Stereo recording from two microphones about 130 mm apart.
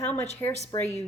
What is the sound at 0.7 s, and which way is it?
Speech, 35° left (ahead or behind).